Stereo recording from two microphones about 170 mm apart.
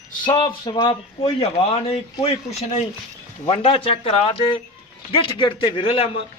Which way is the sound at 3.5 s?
35° left (ahead or behind).